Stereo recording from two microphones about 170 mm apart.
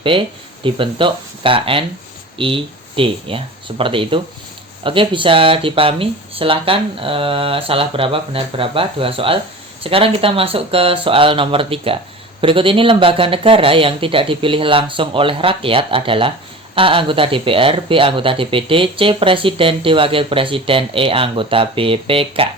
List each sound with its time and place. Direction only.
0.0 s speech: 30° right (ahead or behind)